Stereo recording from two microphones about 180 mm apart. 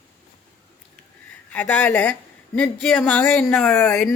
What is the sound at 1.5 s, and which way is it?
Speech, 5° left (ahead or behind).